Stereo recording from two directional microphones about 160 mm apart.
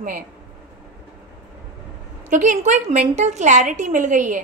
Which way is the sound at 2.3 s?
50° right (ahead or behind).